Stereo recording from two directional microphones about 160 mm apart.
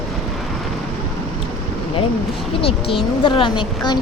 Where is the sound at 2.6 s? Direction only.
35° left (ahead or behind).